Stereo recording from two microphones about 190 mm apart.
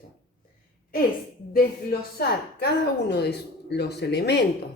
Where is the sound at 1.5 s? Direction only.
55° left (ahead or behind).